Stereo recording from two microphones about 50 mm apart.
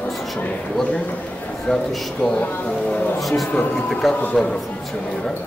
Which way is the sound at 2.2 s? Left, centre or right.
Left.